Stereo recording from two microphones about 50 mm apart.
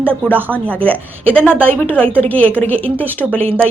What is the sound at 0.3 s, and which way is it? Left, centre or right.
Speech, right.